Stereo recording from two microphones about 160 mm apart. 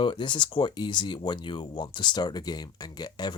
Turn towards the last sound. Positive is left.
turn(degrees=25)  # may be behind; listen again after turning